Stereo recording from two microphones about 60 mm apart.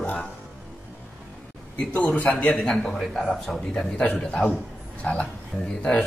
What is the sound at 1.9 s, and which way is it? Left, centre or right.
Speech, left.